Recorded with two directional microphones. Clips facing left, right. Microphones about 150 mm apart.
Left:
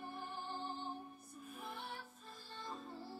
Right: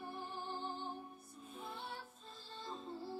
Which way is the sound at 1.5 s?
25° right (ahead or behind).